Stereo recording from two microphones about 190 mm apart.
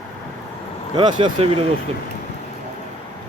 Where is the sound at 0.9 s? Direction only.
25° right (ahead or behind).